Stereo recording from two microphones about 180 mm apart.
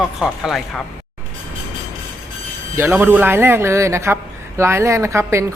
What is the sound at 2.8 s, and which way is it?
Speech, 10° right (ahead or behind).